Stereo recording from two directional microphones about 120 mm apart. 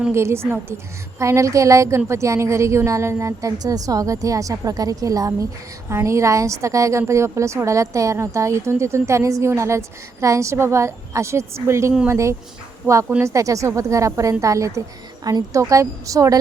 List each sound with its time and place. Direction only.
0.1 s a woman's voice: 20° right (ahead or behind)